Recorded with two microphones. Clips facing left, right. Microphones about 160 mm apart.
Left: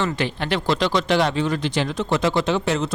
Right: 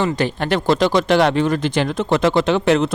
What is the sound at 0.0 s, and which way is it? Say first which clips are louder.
Speech: right 4 dB; 45° right (ahead or behind).